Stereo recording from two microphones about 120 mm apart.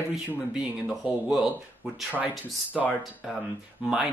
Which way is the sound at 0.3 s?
5° right (ahead or behind).